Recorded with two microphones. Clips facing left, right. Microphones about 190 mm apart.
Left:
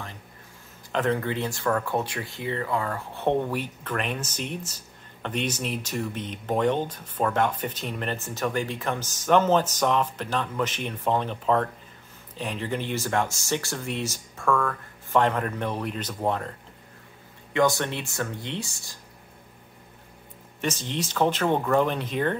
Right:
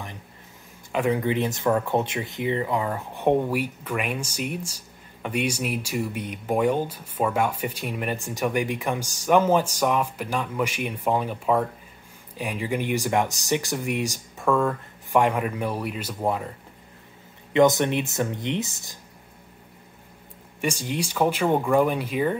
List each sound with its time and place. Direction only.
0.9 s speech: 15° right (ahead or behind)
15.1 s speech: 10° right (ahead or behind)
17.5 s speech: 20° right (ahead or behind)
20.6 s speech: 10° right (ahead or behind)